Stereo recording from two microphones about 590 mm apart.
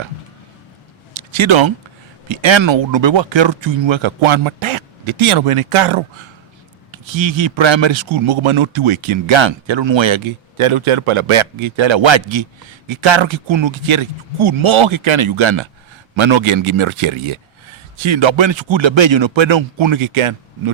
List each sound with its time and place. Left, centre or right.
1.3 s a man's voice: right